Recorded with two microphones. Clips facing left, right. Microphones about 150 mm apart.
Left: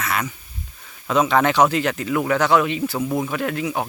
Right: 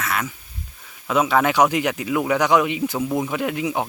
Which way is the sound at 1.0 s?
5° right (ahead or behind).